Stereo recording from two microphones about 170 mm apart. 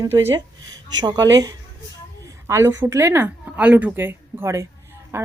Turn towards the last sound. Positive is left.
turn(degrees=-15)  # may be behind; listen again after turning